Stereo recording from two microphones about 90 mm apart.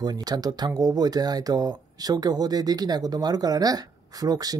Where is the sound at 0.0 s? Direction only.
50° right (ahead or behind).